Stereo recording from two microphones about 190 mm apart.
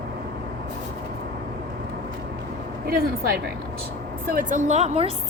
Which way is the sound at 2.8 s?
55° right (ahead or behind).